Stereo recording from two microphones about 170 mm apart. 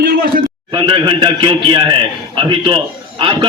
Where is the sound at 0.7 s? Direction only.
25° right (ahead or behind).